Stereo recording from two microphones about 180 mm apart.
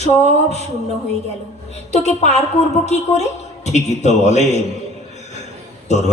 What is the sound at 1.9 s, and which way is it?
A man's voice, 40° left (ahead or behind).